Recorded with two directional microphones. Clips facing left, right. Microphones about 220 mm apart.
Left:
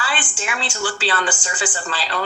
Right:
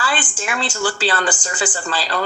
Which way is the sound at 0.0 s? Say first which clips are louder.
Right 3 dB; 40° right (ahead or behind).